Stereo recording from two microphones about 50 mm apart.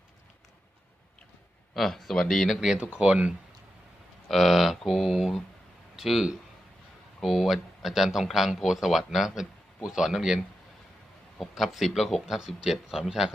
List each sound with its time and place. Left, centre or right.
1.7 s speech: centre
2.9 s speech: right
4.3 s speech: centre
7.3 s speech: centre
11.3 s speech: centre